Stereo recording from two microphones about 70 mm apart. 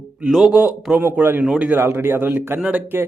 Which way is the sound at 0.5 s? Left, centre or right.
Right.